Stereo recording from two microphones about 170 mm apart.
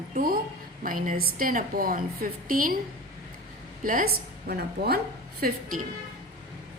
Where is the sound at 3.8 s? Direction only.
55° right (ahead or behind).